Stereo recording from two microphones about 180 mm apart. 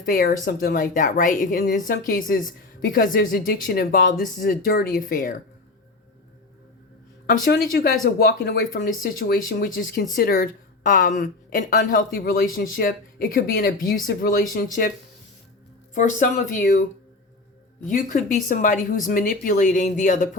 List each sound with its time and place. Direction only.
0.0 s speech: 55° left (ahead or behind)
7.5 s speech: 60° left (ahead or behind)
16.0 s speech: 45° left (ahead or behind)
17.8 s speech: 50° left (ahead or behind)